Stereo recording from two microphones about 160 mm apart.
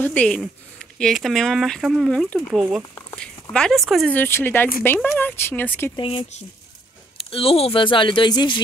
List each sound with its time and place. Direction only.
0.0 s speech: 10° left (ahead or behind)
4.2 s speech: 15° left (ahead or behind)
5.9 s speech: 35° left (ahead or behind)